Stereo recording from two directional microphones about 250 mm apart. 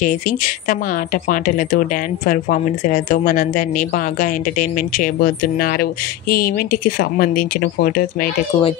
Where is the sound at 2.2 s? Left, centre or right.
Left.